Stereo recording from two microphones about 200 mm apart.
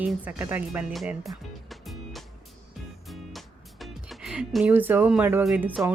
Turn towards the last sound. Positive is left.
turn(degrees=-10)  # may be behind; listen again after turning